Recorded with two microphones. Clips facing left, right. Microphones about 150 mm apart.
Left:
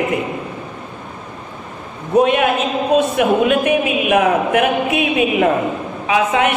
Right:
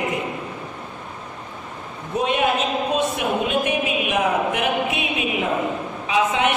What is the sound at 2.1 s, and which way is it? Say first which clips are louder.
A woman's voice: left 7 dB; 60° left (ahead or behind).